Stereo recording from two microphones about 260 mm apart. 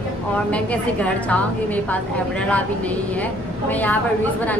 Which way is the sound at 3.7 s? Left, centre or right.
Centre.